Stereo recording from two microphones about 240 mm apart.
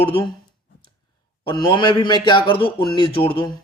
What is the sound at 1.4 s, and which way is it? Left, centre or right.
A man's voice, left.